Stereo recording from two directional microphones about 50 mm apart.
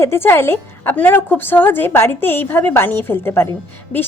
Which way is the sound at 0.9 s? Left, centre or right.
Left.